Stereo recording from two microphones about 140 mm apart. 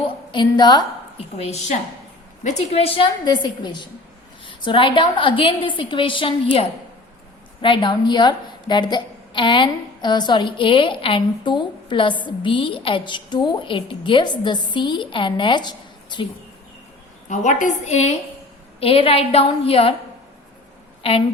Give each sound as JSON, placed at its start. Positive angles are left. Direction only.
{"t": 0.3, "sound": "a woman's voice", "side_deg": 35}
{"t": 1.4, "sound": "a woman's voice", "side_deg": 50}
{"t": 17.2, "sound": "a woman's voice", "side_deg": 65}
{"t": 18.8, "sound": "a woman's voice", "side_deg": 40}
{"t": 21.0, "sound": "a woman's voice", "side_deg": 45}